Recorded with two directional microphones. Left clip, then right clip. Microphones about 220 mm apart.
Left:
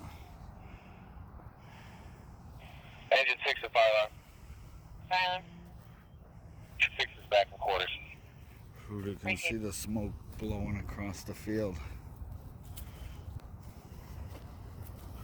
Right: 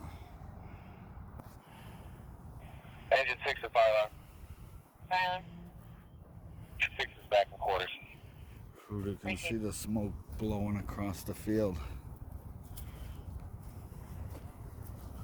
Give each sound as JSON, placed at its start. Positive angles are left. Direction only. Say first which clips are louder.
{"t": 2.6, "sound": "a sound", "louder": "left 1 dB", "side_deg": 10}
{"t": 5.0, "sound": "vehicle", "louder": "left 1 dB", "side_deg": 10}
{"t": 6.7, "sound": "vehicle", "louder": "left 4 dB", "side_deg": 5}
{"t": 8.9, "sound": "a sound", "louder": "even", "side_deg": 0}
{"t": 9.2, "sound": "speech", "louder": "left 6 dB", "side_deg": 15}
{"t": 9.6, "sound": "speech", "louder": "right 1 dB", "side_deg": 0}
{"t": 10.3, "sound": "speech", "louder": "right 3 dB", "side_deg": -20}